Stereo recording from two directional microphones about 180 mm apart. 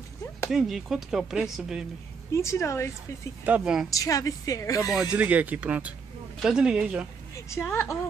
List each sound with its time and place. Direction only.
0.5 s speech: centre (ahead or behind)
2.3 s a woman's voice: 15° left (ahead or behind)
3.4 s speech: 5° right (ahead or behind)
3.9 s speech: 20° left (ahead or behind)
5.1 s speech: 10° right (ahead or behind)
7.3 s a woman's voice: 15° left (ahead or behind)